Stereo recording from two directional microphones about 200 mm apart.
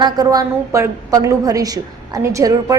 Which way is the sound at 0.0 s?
20° right (ahead or behind).